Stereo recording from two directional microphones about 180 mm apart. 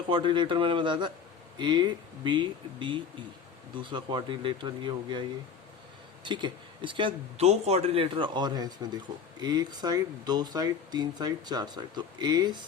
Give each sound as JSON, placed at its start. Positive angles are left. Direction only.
{"t": 0.1, "sound": "speech", "side_deg": -25}
{"t": 6.2, "sound": "speech", "side_deg": -25}